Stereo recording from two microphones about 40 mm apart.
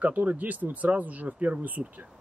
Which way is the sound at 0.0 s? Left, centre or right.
Right.